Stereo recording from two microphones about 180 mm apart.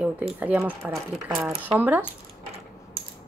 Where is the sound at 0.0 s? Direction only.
5° right (ahead or behind).